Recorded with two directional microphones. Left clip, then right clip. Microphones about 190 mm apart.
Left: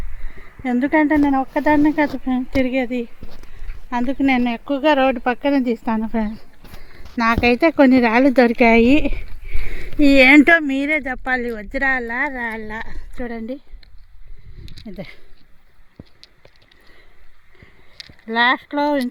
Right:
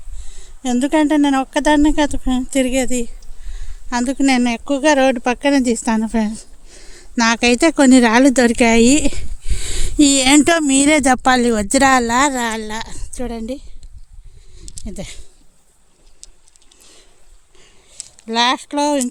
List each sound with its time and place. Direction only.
0.6 s a woman's voice: 30° right (ahead or behind); by 9.7 s 50° right (ahead or behind)
10.0 s speech: 90° right
12.4 s speech: 45° right (ahead or behind)
14.8 s speech: 35° right (ahead or behind)
18.3 s speech: 30° right (ahead or behind)